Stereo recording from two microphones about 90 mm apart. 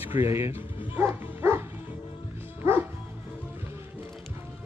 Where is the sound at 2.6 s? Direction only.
30° right (ahead or behind).